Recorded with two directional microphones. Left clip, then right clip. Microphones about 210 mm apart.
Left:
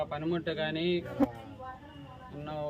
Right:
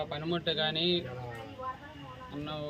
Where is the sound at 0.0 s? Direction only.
5° left (ahead or behind).